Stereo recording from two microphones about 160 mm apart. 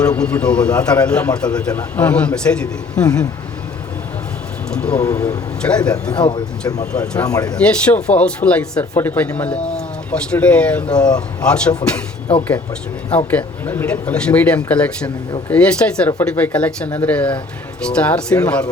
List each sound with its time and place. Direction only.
0.0 s a man's voice: 5° left (ahead or behind)
4.7 s a man's voice: 5° left (ahead or behind)
5.6 s a man's voice: 5° left (ahead or behind)
6.1 s speech: 30° left (ahead or behind)
7.0 s a man's voice: 10° left (ahead or behind)
7.3 s speech: 20° left (ahead or behind)
7.5 s a man's voice: 5° left (ahead or behind)
10.9 s speech: 25° left (ahead or behind)
11.4 s a man's voice: 5° left (ahead or behind)
13.3 s a man's voice: 10° left (ahead or behind)